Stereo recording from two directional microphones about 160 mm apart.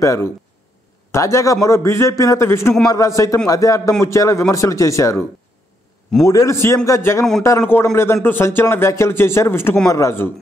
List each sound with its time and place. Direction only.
0.0 s speech: 20° left (ahead or behind)
6.2 s speech: 20° left (ahead or behind)